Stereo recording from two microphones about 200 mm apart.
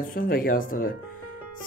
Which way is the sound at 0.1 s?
45° left (ahead or behind).